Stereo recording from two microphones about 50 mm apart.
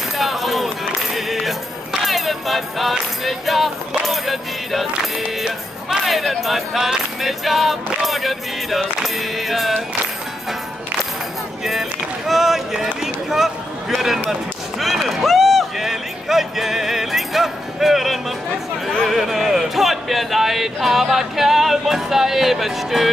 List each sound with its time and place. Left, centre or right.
0.2 s run: centre
1.1 s music: centre
6.0 s a sound: centre
7.2 s music: centre
11.6 s run: centre
19.0 s speech: centre